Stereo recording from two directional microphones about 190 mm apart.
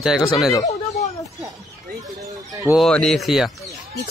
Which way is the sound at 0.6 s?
35° left (ahead or behind).